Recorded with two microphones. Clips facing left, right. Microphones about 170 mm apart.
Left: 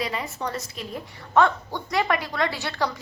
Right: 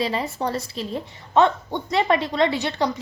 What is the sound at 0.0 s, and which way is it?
A woman's voice, 30° right (ahead or behind).